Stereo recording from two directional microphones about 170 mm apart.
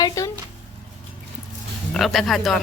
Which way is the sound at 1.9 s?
Centre (ahead or behind).